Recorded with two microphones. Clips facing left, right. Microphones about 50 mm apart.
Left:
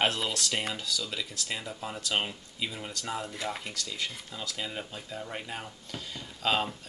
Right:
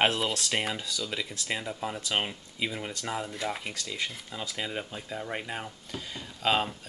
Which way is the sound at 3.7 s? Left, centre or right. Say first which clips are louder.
Right 1 dB; right.